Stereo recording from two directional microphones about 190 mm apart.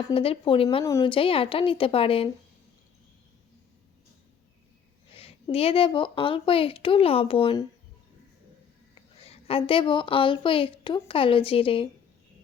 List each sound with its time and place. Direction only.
0.1 s a woman's voice: 30° left (ahead or behind)
0.9 s a woman's voice: 15° left (ahead or behind)
1.1 s a woman's voice: 30° left (ahead or behind)
5.1 s a woman's voice: 30° left (ahead or behind)
9.2 s a woman's voice: 30° left (ahead or behind)